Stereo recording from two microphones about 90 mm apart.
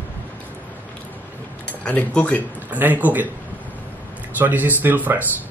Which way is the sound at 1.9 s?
15° left (ahead or behind).